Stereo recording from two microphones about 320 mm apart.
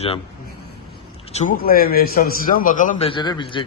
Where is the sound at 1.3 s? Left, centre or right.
Left.